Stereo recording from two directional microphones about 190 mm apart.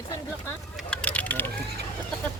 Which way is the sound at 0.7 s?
5° left (ahead or behind).